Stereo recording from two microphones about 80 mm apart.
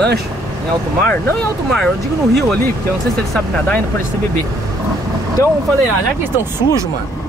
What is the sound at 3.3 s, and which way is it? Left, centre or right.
Speech, centre.